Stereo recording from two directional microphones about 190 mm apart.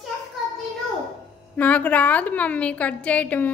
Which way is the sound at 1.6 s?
10° left (ahead or behind).